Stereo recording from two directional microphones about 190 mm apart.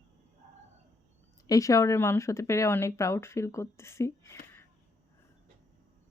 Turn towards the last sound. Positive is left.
turn(degrees=15)  # may be behind; listen again after turning